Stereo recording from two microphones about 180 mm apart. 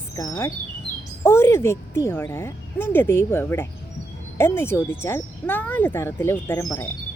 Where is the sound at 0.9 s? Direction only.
65° right (ahead or behind).